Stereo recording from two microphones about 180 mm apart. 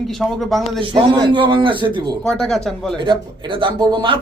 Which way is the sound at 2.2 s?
Centre (ahead or behind).